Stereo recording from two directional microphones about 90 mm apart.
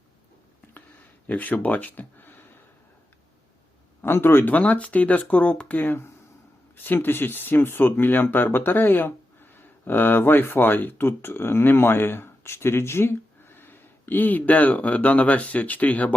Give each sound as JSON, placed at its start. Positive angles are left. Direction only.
{"t": 1.3, "sound": "speech", "side_deg": 20}
{"t": 4.0, "sound": "speech", "side_deg": 25}